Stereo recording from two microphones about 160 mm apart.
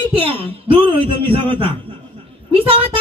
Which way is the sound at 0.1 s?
35° right (ahead or behind).